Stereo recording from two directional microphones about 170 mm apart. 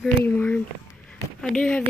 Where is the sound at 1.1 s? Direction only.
5° left (ahead or behind).